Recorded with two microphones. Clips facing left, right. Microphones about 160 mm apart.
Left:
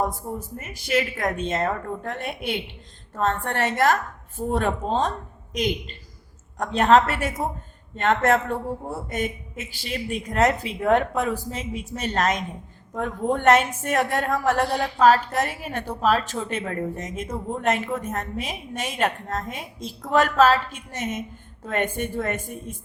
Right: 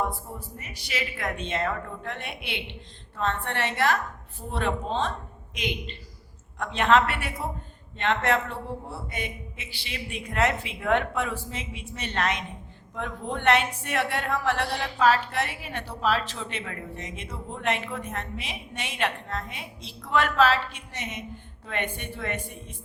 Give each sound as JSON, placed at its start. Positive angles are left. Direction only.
{"t": 0.0, "sound": "a man's voice", "side_deg": 45}